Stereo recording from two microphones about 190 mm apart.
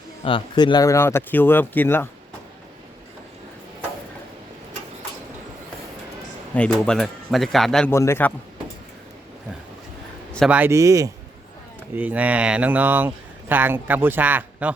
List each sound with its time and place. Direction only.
0.3 s speech: 25° left (ahead or behind)
6.5 s speech: 5° left (ahead or behind)
7.9 s speech: 15° left (ahead or behind)
10.3 s speech: centre (ahead or behind)
10.6 s speech: 15° right (ahead or behind)